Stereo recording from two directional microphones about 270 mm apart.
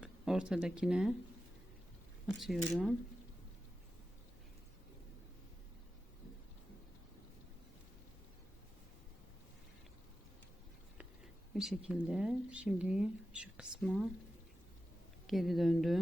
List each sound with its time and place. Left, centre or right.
0.0 s speech: centre
2.2 s speech: centre
11.5 s speech: centre
15.3 s speech: centre